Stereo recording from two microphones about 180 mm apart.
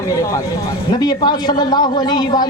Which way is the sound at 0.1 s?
20° left (ahead or behind).